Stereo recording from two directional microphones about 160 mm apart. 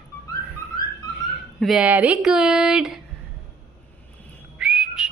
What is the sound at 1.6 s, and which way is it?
Speech, 5° right (ahead or behind).